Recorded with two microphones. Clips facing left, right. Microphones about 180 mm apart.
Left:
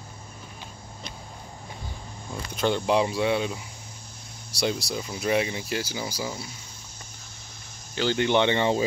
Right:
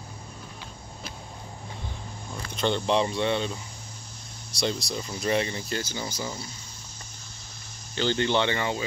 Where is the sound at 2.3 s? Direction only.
5° left (ahead or behind).